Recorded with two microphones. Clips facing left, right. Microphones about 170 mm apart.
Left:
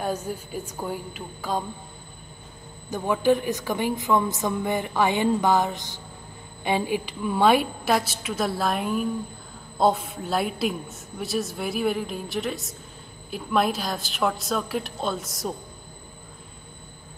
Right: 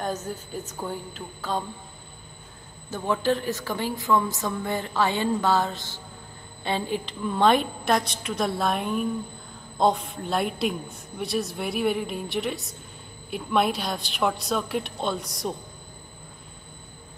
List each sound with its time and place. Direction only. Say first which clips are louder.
0.0 s a woman's voice: left 2 dB; 10° left (ahead or behind)
2.9 s a woman's voice: left 3 dB; 15° left (ahead or behind)